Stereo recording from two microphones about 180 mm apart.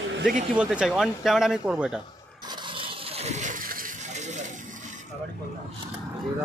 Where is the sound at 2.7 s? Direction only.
30° right (ahead or behind).